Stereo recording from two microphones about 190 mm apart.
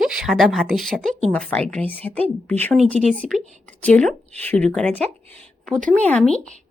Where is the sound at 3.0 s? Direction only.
40° right (ahead or behind).